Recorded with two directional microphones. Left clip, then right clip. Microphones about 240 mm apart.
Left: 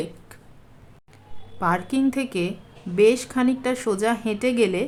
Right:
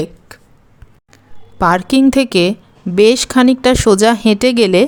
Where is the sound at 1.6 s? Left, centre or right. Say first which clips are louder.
Right 11 dB; right.